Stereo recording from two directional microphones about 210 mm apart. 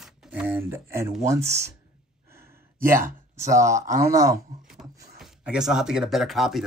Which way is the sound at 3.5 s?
15° right (ahead or behind).